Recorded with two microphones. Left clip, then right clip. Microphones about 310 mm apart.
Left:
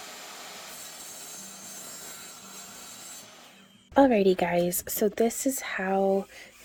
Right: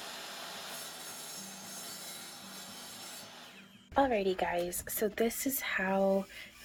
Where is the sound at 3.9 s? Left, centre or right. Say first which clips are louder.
Left 8 dB; left.